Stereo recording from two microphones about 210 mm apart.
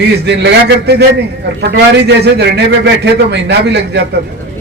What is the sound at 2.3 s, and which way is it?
A man's voice, 55° right (ahead or behind).